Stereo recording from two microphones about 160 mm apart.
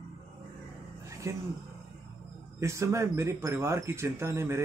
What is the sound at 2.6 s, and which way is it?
Speech, 20° right (ahead or behind).